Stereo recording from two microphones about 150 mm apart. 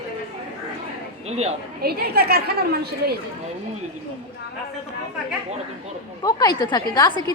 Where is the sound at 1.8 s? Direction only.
90° right.